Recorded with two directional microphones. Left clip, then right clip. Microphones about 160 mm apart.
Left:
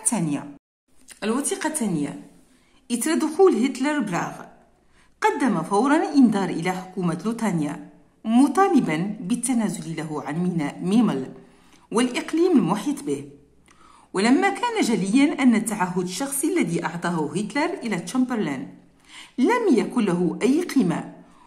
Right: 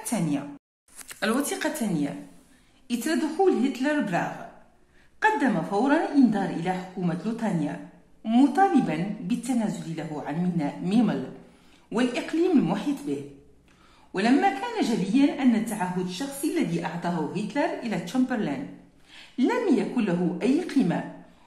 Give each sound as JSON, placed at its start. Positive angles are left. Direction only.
{"t": 0.0, "sound": "a woman's voice", "side_deg": 15}
{"t": 16.1, "sound": "a woman's voice", "side_deg": 35}
{"t": 17.5, "sound": "a woman's voice", "side_deg": 15}